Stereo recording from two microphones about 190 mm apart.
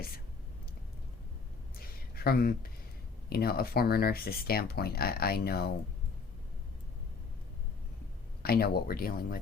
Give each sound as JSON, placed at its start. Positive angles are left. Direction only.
{"t": 1.8, "sound": "a sound", "side_deg": 50}
{"t": 3.2, "sound": "speech", "side_deg": 55}
{"t": 8.4, "sound": "speech", "side_deg": 55}